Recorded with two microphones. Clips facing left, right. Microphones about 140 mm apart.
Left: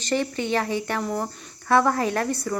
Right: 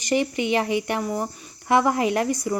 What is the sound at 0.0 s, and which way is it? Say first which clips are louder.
Speech: right 2 dB; 15° right (ahead or behind).